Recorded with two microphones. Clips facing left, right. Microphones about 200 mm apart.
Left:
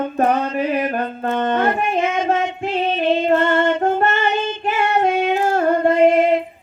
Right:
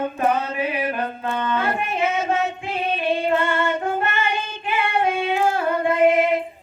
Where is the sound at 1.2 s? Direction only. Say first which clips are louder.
Left 6 dB; 45° left (ahead or behind).